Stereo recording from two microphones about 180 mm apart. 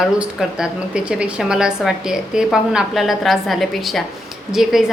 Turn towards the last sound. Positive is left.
turn(degrees=0)  # may be behind; listen again after turning